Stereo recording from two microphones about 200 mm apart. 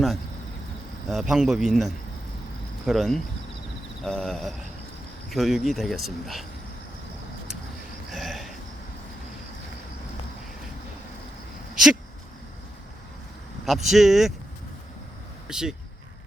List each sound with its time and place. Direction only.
1.0 s speech: centre (ahead or behind)
8.1 s a sound: centre (ahead or behind)
13.7 s speech: centre (ahead or behind)
15.4 s speech: 5° right (ahead or behind)